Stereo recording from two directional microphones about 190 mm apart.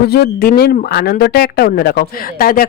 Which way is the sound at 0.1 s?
55° left (ahead or behind).